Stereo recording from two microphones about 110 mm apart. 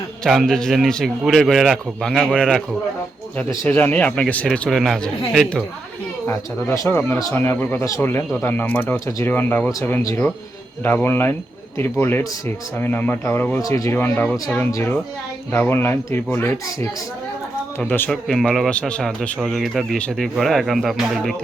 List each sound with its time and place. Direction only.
0.3 s speech: centre (ahead or behind)
3.7 s speech: 15° left (ahead or behind)
4.7 s speech: centre (ahead or behind)
6.2 s speech: 25° left (ahead or behind)
10.8 s speech: 20° left (ahead or behind)
13.6 s speech: 30° left (ahead or behind)
14.0 s speech: 20° left (ahead or behind)
18.1 s speech: 5° left (ahead or behind)